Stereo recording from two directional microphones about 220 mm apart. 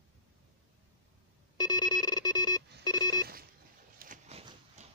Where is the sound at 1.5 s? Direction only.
20° left (ahead or behind).